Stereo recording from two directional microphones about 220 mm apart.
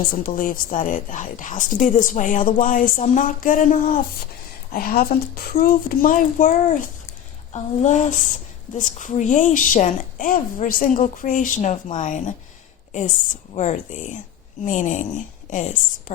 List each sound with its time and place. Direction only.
0.3 s a woman's voice: 40° left (ahead or behind)
13.5 s a woman's voice: 30° left (ahead or behind)